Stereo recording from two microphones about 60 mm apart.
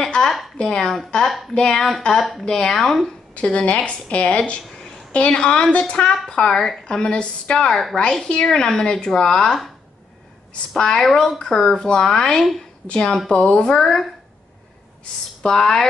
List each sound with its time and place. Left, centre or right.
0.0 s a sound: centre
0.6 s speech: centre
2.4 s speech: centre
3.3 s a woman's voice: centre
4.6 s a sound: centre
5.1 s speech: centre
7.7 s a woman's voice: centre
8.0 s speech: centre
10.7 s speech: centre
12.8 s speech: centre
15.4 s speech: centre